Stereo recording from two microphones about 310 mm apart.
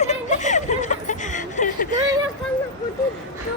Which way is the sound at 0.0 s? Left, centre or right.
Left.